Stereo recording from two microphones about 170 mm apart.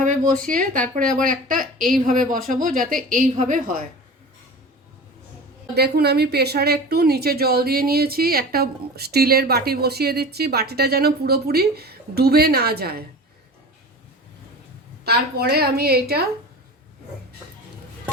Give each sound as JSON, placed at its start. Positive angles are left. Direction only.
{"t": 0.0, "sound": "a woman's voice", "side_deg": -50}
{"t": 5.7, "sound": "a woman's voice", "side_deg": -70}
{"t": 15.0, "sound": "a woman's voice", "side_deg": -65}